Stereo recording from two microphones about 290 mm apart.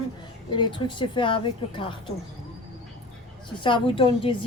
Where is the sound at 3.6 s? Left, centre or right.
Centre.